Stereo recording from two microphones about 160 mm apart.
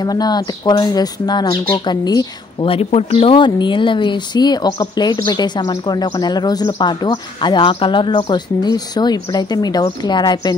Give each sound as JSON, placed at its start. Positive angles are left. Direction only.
{"t": 0.0, "sound": "speech", "side_deg": 25}